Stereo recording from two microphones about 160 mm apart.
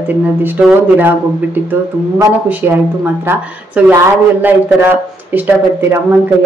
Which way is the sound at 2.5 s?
10° right (ahead or behind).